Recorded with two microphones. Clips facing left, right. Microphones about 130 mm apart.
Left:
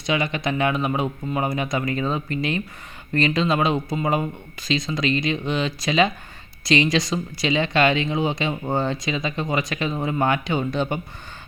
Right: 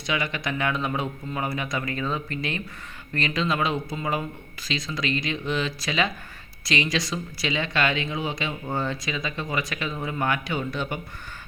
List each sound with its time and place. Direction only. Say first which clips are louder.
0.0 s speech: left 5 dB; 25° left (ahead or behind)